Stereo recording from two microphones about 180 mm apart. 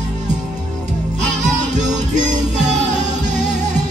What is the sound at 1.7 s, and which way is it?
Music, 40° right (ahead or behind).